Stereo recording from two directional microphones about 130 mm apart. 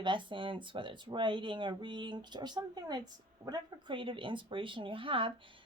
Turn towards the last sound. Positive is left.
turn(degrees=-40)  # may be behind; listen again after turning